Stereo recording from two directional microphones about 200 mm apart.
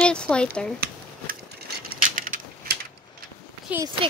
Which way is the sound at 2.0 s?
40° right (ahead or behind).